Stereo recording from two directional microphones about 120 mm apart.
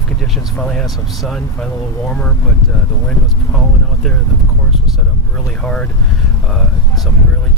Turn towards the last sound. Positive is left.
turn(degrees=5)  # may be behind; listen again after turning